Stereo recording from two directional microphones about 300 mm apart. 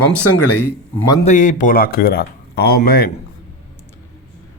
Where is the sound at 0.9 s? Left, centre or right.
Left.